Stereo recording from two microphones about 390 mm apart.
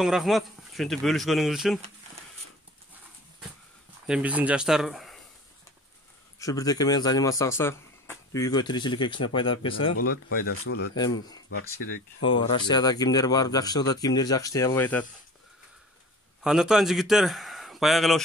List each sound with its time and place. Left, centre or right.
0.0 s a man's voice: centre
4.1 s a man's voice: centre
6.4 s speech: centre
10.4 s speech: left
12.2 s speech: centre
16.4 s a man's voice: centre